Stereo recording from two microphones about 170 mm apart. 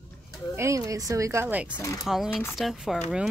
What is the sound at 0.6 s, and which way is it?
Speech, 20° right (ahead or behind).